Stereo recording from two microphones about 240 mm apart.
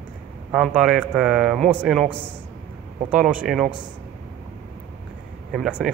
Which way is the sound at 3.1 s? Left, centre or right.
Centre.